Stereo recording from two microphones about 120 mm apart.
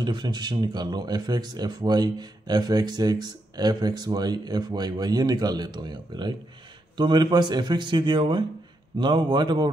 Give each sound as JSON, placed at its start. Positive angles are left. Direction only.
{"t": 0.0, "sound": "speech", "side_deg": -35}